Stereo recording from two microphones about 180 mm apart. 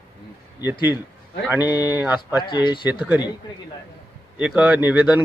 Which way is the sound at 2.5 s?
25° left (ahead or behind).